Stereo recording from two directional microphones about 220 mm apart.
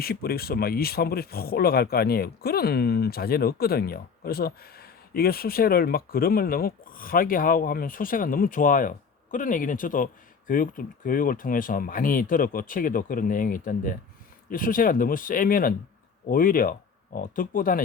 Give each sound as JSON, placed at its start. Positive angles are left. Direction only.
{"t": 0.0, "sound": "speech", "side_deg": 45}